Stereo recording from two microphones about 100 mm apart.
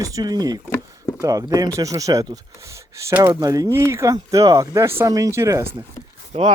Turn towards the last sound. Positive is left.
turn(degrees=-65)  # may be behind; listen again after turning